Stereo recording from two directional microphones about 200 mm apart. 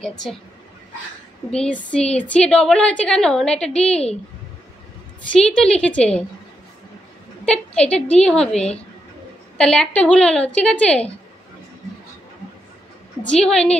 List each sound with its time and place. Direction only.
0.0 s a woman's voice: centre (ahead or behind)
1.5 s a woman's voice: 5° left (ahead or behind)
5.4 s a woman's voice: 5° left (ahead or behind)
7.4 s a woman's voice: 5° left (ahead or behind)
13.2 s a woman's voice: 5° left (ahead or behind)